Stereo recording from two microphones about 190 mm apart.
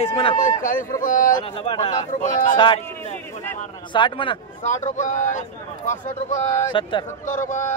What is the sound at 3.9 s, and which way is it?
Speech, 25° left (ahead or behind).